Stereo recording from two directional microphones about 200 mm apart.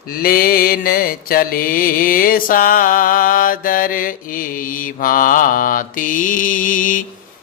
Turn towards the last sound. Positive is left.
turn(degrees=40)  # may be behind; listen again after turning